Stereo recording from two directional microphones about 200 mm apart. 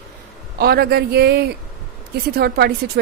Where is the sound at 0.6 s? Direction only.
50° right (ahead or behind).